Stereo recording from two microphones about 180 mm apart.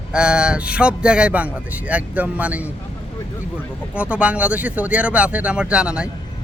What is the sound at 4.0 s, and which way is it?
Speech, 5° right (ahead or behind).